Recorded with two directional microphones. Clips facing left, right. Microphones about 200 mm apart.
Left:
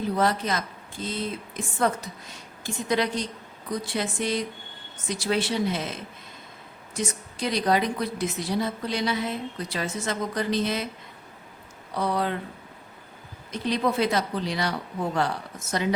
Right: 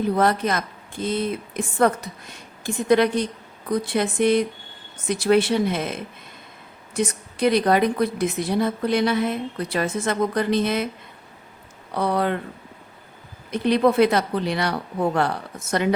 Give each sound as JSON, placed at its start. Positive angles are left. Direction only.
{"t": 0.2, "sound": "a woman's voice", "side_deg": -55}
{"t": 11.9, "sound": "a woman's voice", "side_deg": -60}
{"t": 13.5, "sound": "a woman's voice", "side_deg": -60}